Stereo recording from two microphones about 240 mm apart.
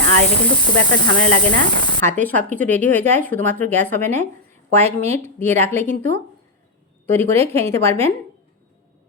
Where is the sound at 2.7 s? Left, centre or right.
Right.